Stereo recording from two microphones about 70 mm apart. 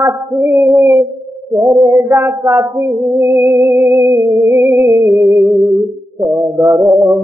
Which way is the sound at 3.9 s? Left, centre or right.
Right.